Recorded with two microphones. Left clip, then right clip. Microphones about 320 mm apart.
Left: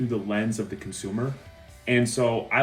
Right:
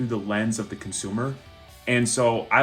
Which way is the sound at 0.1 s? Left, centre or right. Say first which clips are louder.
Right 1 dB; centre.